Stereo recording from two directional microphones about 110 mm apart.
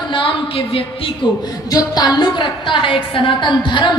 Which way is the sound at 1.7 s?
35° left (ahead or behind).